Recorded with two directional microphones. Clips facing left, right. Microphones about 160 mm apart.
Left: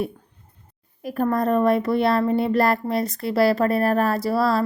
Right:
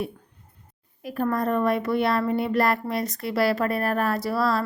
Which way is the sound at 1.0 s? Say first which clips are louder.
Left 3 dB; 45° left (ahead or behind).